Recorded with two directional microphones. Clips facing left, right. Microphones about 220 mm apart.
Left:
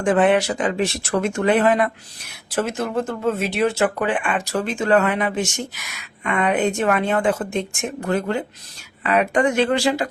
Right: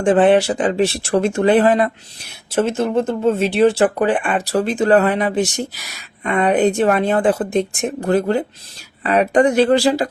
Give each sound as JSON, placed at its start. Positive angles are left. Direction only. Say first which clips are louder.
{"t": 0.0, "sound": "speech", "louder": "right 4 dB", "side_deg": -30}